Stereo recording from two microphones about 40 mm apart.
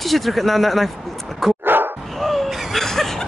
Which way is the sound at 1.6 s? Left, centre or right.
Right.